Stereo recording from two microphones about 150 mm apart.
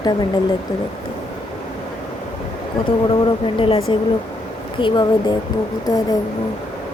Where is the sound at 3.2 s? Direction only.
35° left (ahead or behind).